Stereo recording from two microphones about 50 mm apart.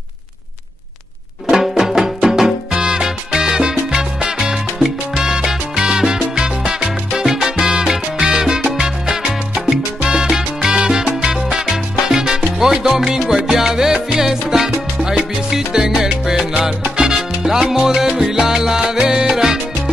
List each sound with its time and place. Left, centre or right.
1.5 s music: centre
2.2 s salsa music: centre
15.0 s music: centre
16.9 s salsa music: centre